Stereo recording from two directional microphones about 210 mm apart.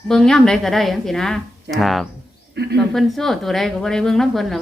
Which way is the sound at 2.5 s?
50° right (ahead or behind).